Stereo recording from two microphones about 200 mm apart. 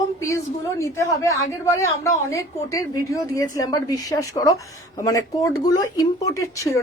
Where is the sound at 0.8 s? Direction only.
15° left (ahead or behind).